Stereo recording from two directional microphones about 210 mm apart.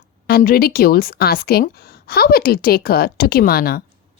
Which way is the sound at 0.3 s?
45° left (ahead or behind).